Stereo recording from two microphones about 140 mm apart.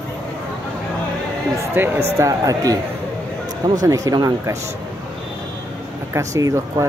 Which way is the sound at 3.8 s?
25° right (ahead or behind).